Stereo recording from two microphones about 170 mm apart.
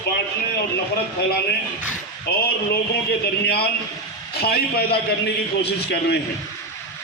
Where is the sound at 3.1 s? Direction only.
70° left (ahead or behind).